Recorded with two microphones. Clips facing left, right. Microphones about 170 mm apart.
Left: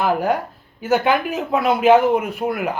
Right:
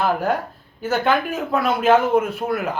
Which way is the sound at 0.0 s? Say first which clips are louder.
Left 2 dB; 15° left (ahead or behind).